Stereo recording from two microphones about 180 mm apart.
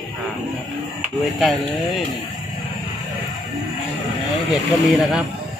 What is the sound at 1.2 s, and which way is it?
Speech, centre (ahead or behind).